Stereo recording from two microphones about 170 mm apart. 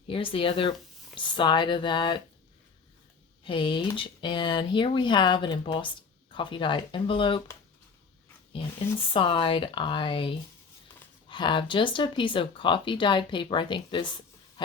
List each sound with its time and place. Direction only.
0.1 s speech: 30° left (ahead or behind)
3.4 s speech: 30° left (ahead or behind)
9.1 s speech: 30° left (ahead or behind)